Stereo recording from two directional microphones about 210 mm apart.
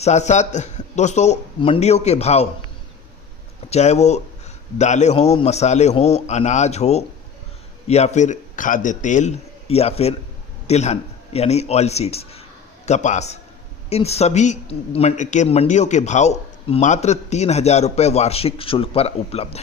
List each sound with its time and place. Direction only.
0.0 s a man's voice: 35° left (ahead or behind)
3.7 s a man's voice: 30° left (ahead or behind)